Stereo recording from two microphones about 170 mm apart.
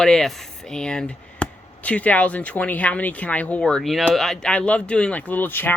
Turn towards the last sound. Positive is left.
turn(degrees=10)  # may be behind; listen again after turning